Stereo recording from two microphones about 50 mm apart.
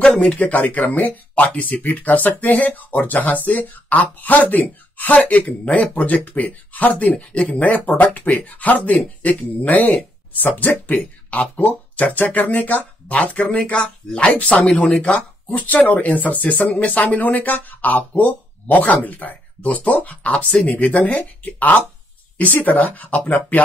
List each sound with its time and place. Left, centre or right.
0.1 s speech: centre
0.4 s speech: left